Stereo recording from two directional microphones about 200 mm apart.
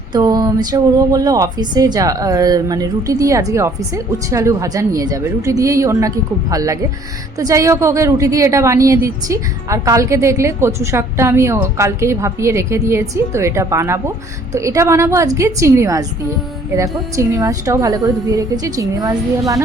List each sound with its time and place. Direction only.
0.1 s speech: 20° right (ahead or behind)